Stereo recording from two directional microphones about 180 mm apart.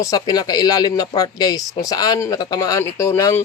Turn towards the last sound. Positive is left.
turn(degrees=15)  # may be behind; listen again after turning